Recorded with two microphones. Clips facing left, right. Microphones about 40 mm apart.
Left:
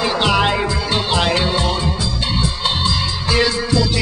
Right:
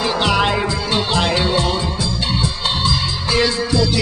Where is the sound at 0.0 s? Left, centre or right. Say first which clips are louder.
Left 1 dB; centre.